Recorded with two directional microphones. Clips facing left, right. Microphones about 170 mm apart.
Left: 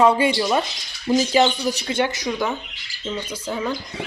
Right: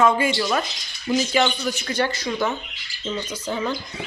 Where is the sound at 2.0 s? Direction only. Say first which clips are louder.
Right 1 dB; 20° left (ahead or behind).